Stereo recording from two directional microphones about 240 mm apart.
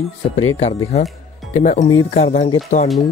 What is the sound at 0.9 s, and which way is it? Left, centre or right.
Speech, left.